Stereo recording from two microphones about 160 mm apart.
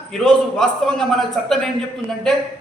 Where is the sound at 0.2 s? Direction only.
5° left (ahead or behind).